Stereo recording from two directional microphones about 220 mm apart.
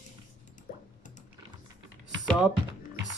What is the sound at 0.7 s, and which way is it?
Music, 40° left (ahead or behind).